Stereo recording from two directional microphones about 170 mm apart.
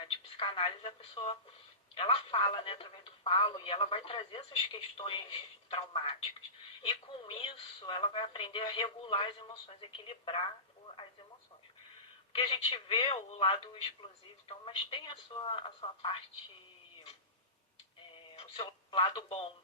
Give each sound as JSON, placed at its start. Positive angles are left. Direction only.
{"t": 0.0, "sound": "speech", "side_deg": 30}
{"t": 12.3, "sound": "speech", "side_deg": 30}
{"t": 18.1, "sound": "radio", "side_deg": 30}